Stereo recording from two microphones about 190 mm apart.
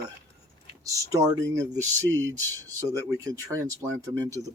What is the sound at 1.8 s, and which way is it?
Speech, 10° left (ahead or behind).